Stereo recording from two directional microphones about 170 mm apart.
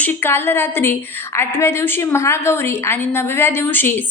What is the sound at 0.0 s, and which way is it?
A woman's voice, 15° left (ahead or behind).